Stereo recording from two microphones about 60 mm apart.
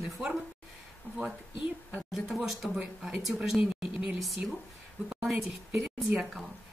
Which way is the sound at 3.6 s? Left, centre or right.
Centre.